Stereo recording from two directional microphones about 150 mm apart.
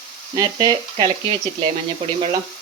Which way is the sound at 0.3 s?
25° right (ahead or behind).